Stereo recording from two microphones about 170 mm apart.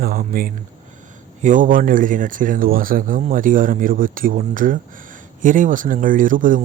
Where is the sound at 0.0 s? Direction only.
60° right (ahead or behind).